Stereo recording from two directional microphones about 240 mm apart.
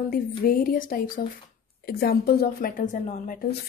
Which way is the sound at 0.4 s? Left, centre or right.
Left.